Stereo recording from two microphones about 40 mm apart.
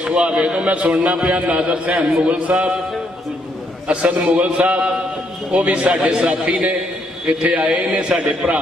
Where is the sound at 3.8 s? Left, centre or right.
Right.